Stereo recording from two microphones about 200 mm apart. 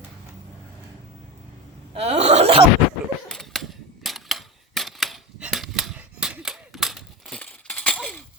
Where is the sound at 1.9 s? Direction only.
30° right (ahead or behind).